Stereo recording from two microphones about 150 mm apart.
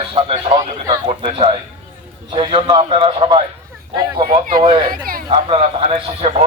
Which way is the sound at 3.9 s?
25° right (ahead or behind).